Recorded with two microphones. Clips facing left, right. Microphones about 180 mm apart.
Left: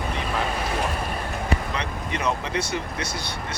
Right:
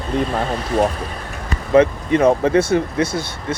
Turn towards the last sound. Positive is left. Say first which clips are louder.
# right 8 dB
turn(degrees=-50)  # may be behind; listen again after turning